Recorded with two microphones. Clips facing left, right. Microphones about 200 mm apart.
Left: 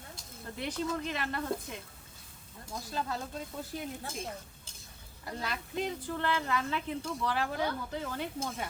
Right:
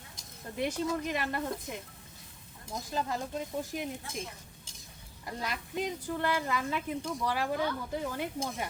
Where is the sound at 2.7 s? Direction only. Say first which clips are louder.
Right 2 dB; 20° right (ahead or behind).